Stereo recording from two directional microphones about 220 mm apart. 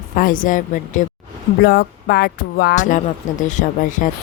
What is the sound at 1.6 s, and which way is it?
Music, 45° left (ahead or behind).